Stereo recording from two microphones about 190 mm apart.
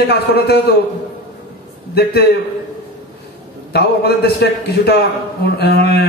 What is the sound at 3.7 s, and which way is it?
Speech, 60° left (ahead or behind).